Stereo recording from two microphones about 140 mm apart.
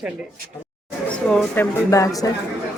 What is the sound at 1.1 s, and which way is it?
Speech, 5° left (ahead or behind).